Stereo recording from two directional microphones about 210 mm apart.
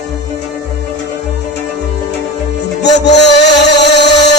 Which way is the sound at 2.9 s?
55° left (ahead or behind).